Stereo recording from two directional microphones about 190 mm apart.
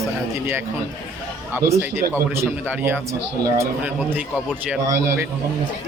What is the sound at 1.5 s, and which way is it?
Speech, 10° right (ahead or behind).